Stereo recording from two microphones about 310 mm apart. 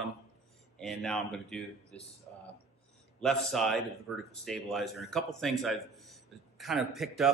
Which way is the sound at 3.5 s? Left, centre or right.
Centre.